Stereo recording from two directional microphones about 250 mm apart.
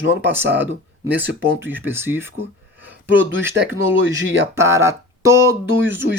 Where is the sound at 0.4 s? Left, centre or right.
Right.